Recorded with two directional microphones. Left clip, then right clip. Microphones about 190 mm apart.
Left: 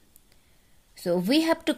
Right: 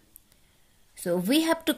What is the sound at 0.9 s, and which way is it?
Speech, 15° left (ahead or behind).